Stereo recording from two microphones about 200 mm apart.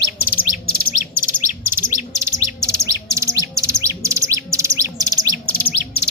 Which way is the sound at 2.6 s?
15° right (ahead or behind).